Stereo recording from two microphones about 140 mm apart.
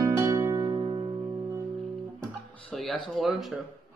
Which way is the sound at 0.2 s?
20° right (ahead or behind).